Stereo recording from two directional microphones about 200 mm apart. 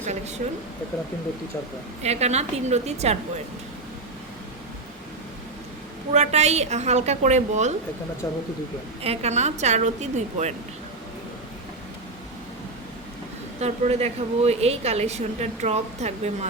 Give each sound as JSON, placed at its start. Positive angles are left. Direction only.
{"t": 0.4, "sound": "a woman's voice", "side_deg": -40}
{"t": 2.0, "sound": "a woman's voice", "side_deg": -35}
{"t": 6.1, "sound": "a woman's voice", "side_deg": -35}
{"t": 9.0, "sound": "a woman's voice", "side_deg": -30}
{"t": 13.6, "sound": "a woman's voice", "side_deg": -30}